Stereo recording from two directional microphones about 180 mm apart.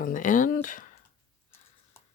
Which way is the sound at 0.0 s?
45° left (ahead or behind).